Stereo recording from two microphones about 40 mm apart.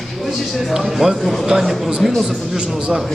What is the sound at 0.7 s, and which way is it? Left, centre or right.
A man's voice, centre.